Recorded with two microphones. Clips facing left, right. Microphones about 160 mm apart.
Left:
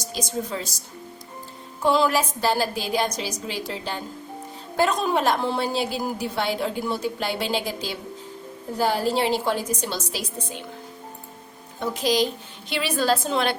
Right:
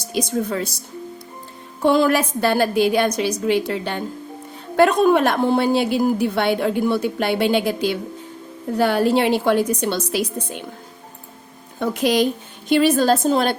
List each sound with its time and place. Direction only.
0.0 s a woman's voice: 60° right (ahead or behind)
1.8 s a woman's voice: 55° right (ahead or behind)
11.8 s a woman's voice: 60° right (ahead or behind); by 13.6 s 40° right (ahead or behind)